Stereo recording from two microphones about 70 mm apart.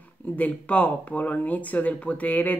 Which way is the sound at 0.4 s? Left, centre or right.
Left.